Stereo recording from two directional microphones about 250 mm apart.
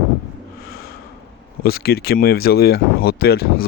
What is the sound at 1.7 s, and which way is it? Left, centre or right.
Speech, left.